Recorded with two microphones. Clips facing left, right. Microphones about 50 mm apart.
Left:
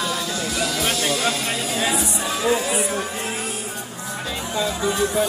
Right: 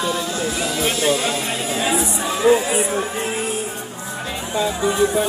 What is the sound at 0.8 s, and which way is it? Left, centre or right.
Music, right.